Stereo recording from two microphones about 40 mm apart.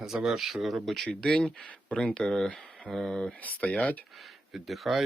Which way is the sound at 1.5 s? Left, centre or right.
Left.